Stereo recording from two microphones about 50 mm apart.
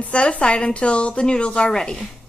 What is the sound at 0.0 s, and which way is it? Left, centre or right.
Speech, left.